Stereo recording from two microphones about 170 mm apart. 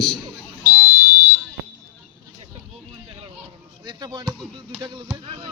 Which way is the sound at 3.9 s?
25° right (ahead or behind).